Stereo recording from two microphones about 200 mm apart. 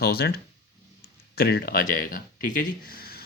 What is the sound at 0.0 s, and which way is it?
Speech, 50° left (ahead or behind).